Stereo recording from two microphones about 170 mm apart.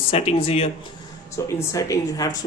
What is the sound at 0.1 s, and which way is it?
Speech, 35° left (ahead or behind).